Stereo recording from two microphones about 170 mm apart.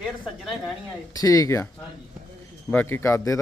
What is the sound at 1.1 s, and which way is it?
Speech, 20° left (ahead or behind).